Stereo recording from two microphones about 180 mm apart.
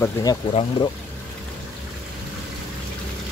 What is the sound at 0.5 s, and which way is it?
Speech, 35° left (ahead or behind).